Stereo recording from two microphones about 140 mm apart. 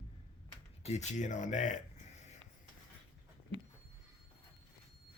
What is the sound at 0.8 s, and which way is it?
Speech, 55° left (ahead or behind).